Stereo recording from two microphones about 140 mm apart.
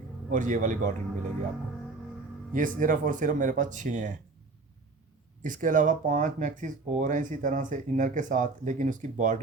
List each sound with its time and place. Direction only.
0.3 s a man's voice: 65° right (ahead or behind)
2.5 s speech: 70° right (ahead or behind)
5.4 s speech: 70° right (ahead or behind)